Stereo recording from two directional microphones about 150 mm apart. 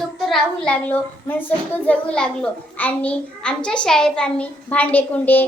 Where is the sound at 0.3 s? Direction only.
5° left (ahead or behind).